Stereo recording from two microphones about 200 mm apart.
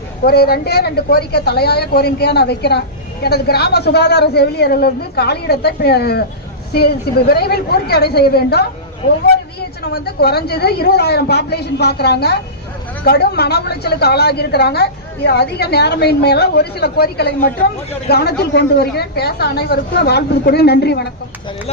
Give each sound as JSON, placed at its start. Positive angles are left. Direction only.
{"t": 0.3, "sound": "a woman's voice", "side_deg": 50}